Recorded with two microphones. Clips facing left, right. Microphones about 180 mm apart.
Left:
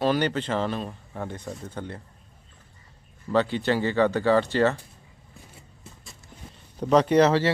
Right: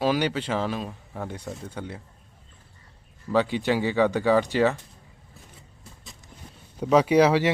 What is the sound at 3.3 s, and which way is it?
Speech, 10° right (ahead or behind).